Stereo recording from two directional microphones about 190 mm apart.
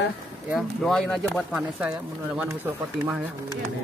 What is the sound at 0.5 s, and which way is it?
Speech, centre (ahead or behind).